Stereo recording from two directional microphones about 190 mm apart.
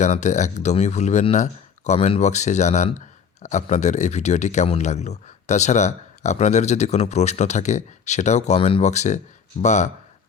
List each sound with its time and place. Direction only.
0.0 s speech: 40° left (ahead or behind)